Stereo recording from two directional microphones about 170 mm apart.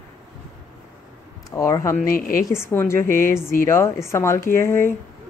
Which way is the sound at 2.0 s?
55° left (ahead or behind).